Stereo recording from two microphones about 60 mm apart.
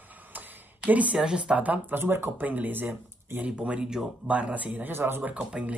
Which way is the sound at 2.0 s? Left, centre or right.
Right.